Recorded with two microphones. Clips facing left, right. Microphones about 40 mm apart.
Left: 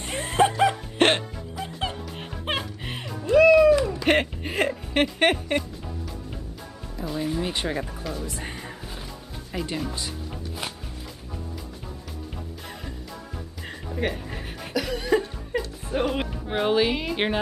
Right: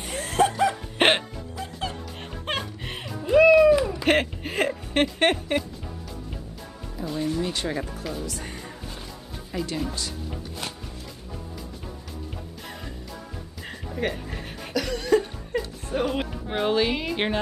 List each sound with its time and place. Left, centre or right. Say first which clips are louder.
0.1 s music: left 1 dB; left
0.9 s music: right 1 dB; centre
1.6 s music: left 2 dB; left
2.4 s music: left 1 dB; centre
3.3 s a sound: even; centre
7.0 s music: right 1 dB; centre
7.3 s speech: even; centre
8.0 s speech: even; centre
8.3 s speech: left 1 dB; left
10.6 s music: left 1 dB; centre
13.7 s chuckle: even; centre
15.9 s speech: left 1 dB; centre